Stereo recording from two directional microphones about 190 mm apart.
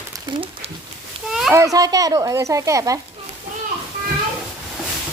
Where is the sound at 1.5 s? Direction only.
15° right (ahead or behind).